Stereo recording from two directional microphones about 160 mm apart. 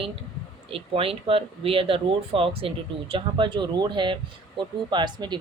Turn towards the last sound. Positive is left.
turn(degrees=-30)  # may be behind; listen again after turning